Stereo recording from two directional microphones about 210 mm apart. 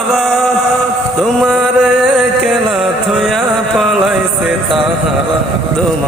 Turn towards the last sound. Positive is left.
turn(degrees=0)  # may be behind; listen again after turning